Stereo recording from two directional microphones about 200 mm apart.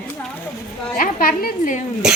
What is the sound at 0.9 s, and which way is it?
Speech, 45° left (ahead or behind).